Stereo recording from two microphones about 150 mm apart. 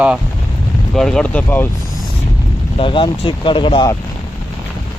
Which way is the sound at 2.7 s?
35° left (ahead or behind).